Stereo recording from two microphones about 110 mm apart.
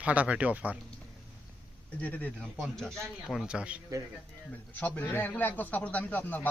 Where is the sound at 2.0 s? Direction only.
15° left (ahead or behind).